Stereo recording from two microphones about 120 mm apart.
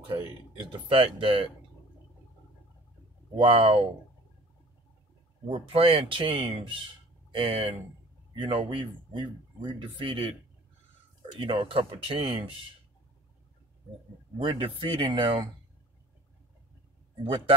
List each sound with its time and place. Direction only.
0.8 s speech: 45° right (ahead or behind)
3.3 s speech: 45° right (ahead or behind)
5.5 s speech: 50° right (ahead or behind)
11.3 s speech: 45° right (ahead or behind)
14.4 s speech: 45° right (ahead or behind)